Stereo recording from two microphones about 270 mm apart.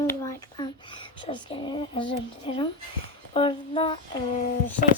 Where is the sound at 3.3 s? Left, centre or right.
Centre.